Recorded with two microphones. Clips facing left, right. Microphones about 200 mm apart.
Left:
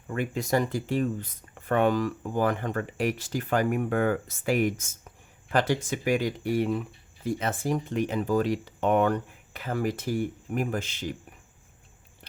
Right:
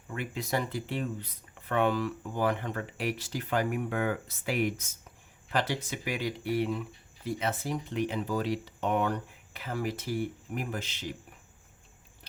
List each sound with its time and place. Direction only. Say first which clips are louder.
0.1 s speech: left 6 dB; 45° left (ahead or behind)